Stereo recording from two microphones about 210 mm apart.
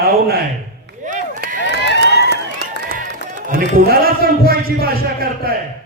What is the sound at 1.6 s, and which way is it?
Run, 55° left (ahead or behind).